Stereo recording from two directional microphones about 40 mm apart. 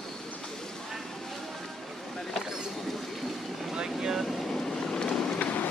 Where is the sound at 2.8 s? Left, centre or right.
Centre.